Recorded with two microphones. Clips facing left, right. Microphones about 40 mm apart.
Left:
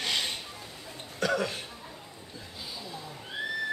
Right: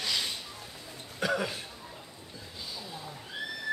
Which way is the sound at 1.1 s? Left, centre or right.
Centre.